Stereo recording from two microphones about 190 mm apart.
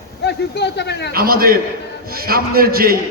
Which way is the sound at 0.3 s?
60° left (ahead or behind).